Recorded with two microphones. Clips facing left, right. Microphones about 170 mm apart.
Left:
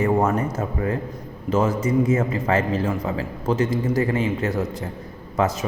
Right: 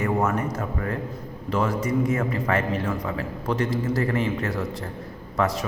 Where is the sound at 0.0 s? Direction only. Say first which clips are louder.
Left 4 dB; 30° left (ahead or behind).